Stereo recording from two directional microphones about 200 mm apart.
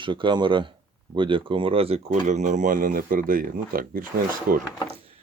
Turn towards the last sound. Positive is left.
turn(degrees=-45)  # may be behind; listen again after turning